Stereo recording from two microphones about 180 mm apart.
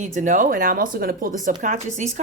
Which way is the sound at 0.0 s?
45° right (ahead or behind).